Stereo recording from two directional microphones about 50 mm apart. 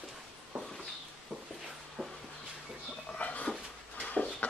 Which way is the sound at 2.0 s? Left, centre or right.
Right.